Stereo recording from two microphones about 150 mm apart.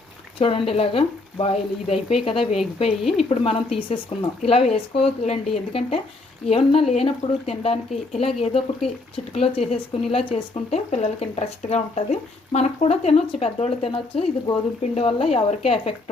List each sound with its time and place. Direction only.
0.3 s speech: 40° left (ahead or behind)
3.0 s a woman's voice: centre (ahead or behind)
3.2 s speech: 40° left (ahead or behind)
6.5 s speech: 40° left (ahead or behind)